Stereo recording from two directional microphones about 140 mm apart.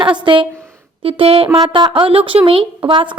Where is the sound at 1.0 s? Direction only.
40° right (ahead or behind).